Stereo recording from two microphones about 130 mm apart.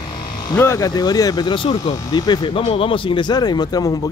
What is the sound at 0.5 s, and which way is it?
Speech, 25° left (ahead or behind).